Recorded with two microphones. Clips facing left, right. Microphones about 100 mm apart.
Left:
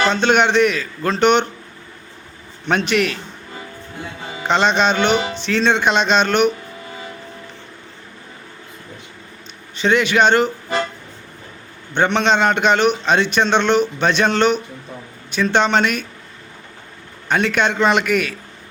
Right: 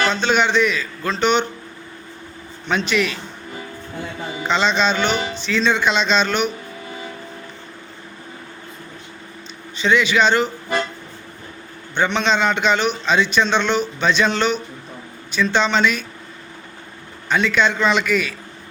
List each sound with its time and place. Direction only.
0.1 s a man's voice: 60° left (ahead or behind)
2.6 s a man's voice: 60° left (ahead or behind)
4.4 s a man's voice: 60° left (ahead or behind)
9.7 s a man's voice: 55° left (ahead or behind)
11.9 s a man's voice: 55° left (ahead or behind)
17.2 s a man's voice: 55° left (ahead or behind)